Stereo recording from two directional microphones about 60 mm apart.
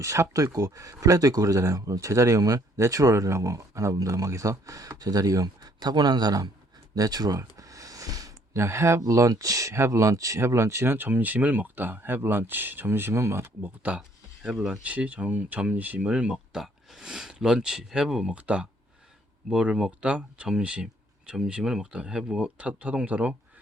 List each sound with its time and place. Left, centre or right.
0.0 s speech: right
2.6 s speech: right
6.9 s a sound: right
8.5 s speech: right
9.0 s speech: right
9.7 s speech: right
13.4 s speech: right